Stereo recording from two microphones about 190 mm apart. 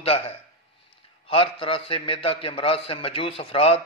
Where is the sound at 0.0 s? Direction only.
30° left (ahead or behind).